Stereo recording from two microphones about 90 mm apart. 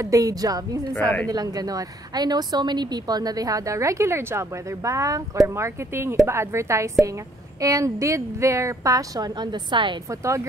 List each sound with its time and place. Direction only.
0.0 s a woman's voice: 40° right (ahead or behind)
0.9 s a woman's voice: 20° left (ahead or behind)
1.3 s a woman's voice: 45° right (ahead or behind); by 9.9 s 60° right (ahead or behind)
10.0 s a woman's voice: 35° right (ahead or behind)